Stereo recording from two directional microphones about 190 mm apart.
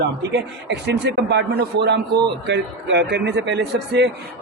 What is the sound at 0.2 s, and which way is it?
A man's voice, 65° right (ahead or behind).